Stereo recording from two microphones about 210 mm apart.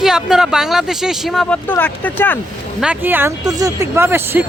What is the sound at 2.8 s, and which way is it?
Speech, 5° right (ahead or behind).